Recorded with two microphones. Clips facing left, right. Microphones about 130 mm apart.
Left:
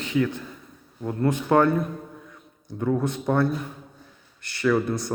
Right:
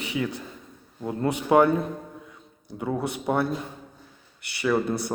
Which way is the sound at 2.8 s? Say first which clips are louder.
Left 4 dB; 10° right (ahead or behind).